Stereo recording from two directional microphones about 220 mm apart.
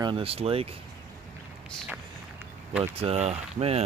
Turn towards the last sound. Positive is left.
turn(degrees=-30)  # may be behind; listen again after turning